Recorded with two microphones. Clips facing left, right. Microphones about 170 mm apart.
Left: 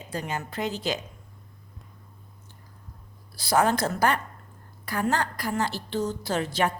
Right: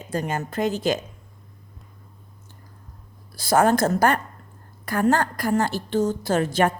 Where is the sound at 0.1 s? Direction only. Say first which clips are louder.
Right 6 dB; 45° right (ahead or behind).